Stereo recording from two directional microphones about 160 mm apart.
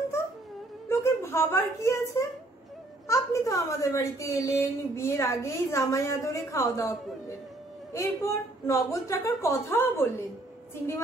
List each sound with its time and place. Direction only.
0.8 s a woman's voice: 15° left (ahead or behind)